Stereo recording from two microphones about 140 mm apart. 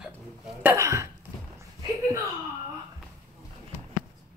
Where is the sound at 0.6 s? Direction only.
20° right (ahead or behind).